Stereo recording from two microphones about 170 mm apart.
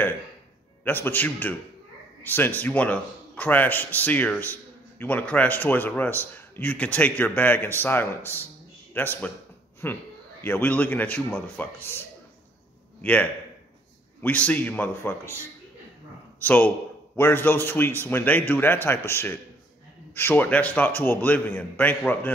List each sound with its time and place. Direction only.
0.8 s a man's voice: 10° left (ahead or behind)
16.3 s a man's voice: 10° left (ahead or behind)